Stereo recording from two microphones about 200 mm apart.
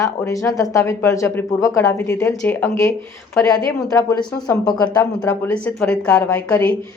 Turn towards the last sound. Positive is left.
turn(degrees=10)  # may be behind; listen again after turning